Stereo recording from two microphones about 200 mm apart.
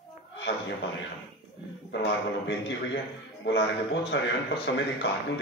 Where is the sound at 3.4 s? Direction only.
60° left (ahead or behind).